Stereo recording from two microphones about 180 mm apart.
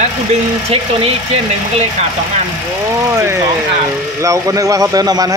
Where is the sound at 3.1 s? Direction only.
15° right (ahead or behind).